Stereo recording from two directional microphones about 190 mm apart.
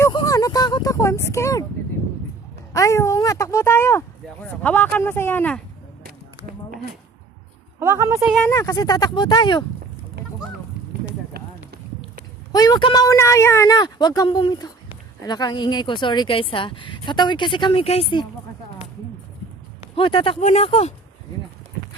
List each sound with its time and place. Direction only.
0.0 s a sound: 20° left (ahead or behind)
2.7 s speech: 15° left (ahead or behind)
6.0 s a sound: 50° right (ahead or behind)
7.8 s speech: 15° right (ahead or behind)
8.4 s speech: 15° left (ahead or behind)
11.3 s run: 55° right (ahead or behind)
12.5 s speech: 20° left (ahead or behind)
20.0 s speech: 30° left (ahead or behind)